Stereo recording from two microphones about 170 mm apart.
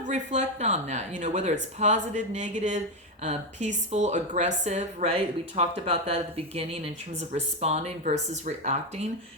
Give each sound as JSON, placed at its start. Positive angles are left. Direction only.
{"t": 0.0, "sound": "speech", "side_deg": -45}